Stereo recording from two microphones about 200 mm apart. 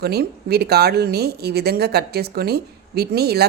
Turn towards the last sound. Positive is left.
turn(degrees=-55)  # may be behind; listen again after turning